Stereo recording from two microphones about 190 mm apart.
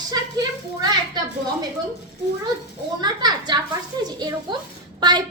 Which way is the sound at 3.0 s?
20° right (ahead or behind).